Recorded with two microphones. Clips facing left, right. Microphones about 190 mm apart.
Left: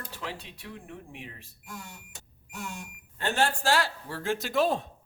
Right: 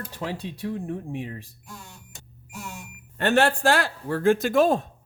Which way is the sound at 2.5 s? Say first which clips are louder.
Right 1 dB; centre (ahead or behind).